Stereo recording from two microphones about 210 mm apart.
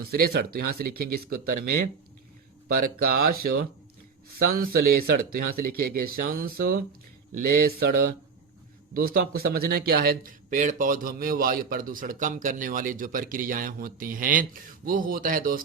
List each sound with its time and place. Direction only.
0.0 s a man's voice: 45° right (ahead or behind)